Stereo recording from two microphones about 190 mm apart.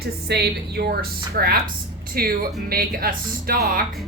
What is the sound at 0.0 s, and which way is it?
A woman's voice, 55° right (ahead or behind).